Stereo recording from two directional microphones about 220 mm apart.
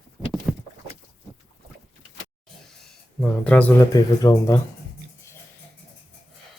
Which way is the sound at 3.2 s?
5° left (ahead or behind).